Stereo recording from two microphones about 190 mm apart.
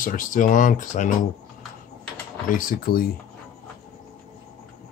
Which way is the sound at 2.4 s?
45° left (ahead or behind).